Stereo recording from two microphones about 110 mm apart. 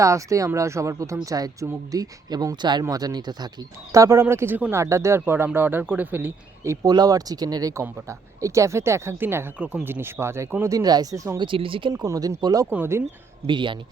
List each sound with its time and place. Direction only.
0.0 s speech: 30° right (ahead or behind)
3.9 s speech: 25° right (ahead or behind)
6.8 s speech: 35° right (ahead or behind)
11.3 s speech: 50° right (ahead or behind)
11.9 s speech: 35° right (ahead or behind)
12.7 s speech: 20° right (ahead or behind)
13.5 s speech: 45° right (ahead or behind)